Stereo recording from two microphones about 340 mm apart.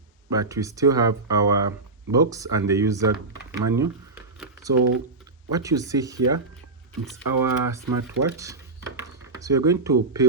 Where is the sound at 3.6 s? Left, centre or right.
Centre.